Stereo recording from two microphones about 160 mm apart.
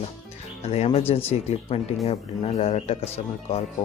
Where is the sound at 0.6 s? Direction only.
40° left (ahead or behind).